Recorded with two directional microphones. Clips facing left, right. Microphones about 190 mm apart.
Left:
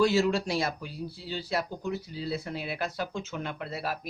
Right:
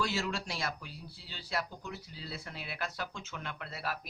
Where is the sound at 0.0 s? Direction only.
35° left (ahead or behind).